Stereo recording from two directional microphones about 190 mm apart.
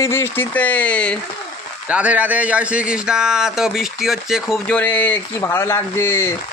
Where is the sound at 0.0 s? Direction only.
10° left (ahead or behind).